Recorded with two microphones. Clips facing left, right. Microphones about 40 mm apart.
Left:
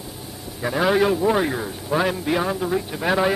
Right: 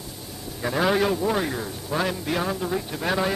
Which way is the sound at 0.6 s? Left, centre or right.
Centre.